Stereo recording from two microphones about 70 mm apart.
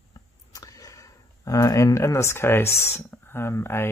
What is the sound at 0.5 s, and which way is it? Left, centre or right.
Speech, left.